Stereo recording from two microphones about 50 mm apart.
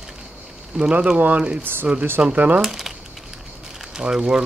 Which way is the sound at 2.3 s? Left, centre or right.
Right.